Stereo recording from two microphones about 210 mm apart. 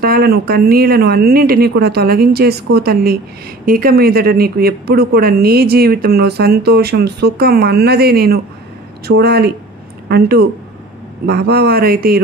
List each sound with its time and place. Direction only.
0.0 s speech: 45° right (ahead or behind)